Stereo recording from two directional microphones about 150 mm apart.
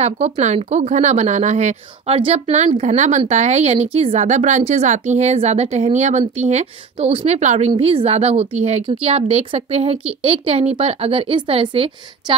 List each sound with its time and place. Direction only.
0.0 s a woman's voice: 50° right (ahead or behind)